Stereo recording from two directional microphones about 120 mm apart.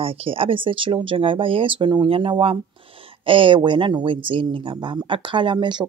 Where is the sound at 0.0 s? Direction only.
50° right (ahead or behind).